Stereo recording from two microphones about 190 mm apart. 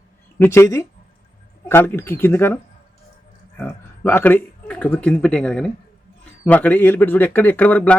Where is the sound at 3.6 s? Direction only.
10° left (ahead or behind).